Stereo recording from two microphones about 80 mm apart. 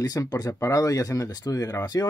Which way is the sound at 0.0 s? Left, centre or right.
Left.